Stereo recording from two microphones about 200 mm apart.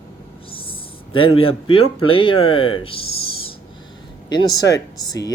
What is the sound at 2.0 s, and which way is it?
Speech, 25° left (ahead or behind).